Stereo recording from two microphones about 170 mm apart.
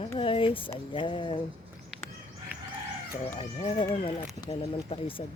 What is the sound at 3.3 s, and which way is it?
Speech, 40° left (ahead or behind).